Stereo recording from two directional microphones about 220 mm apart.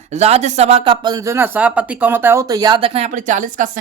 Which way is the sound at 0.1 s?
30° right (ahead or behind).